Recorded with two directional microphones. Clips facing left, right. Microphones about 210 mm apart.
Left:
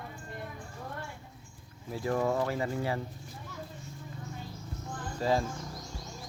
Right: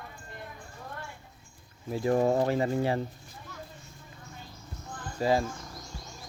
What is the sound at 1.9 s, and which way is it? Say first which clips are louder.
Speech: right 5 dB; 20° right (ahead or behind).